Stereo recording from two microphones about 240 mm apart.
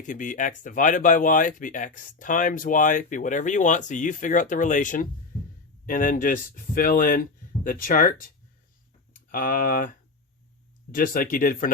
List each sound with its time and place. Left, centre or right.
0.0 s speech: left
9.3 s speech: left
10.9 s speech: left